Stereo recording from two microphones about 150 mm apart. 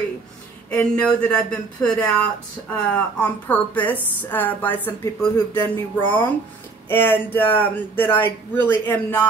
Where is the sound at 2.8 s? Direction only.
10° left (ahead or behind).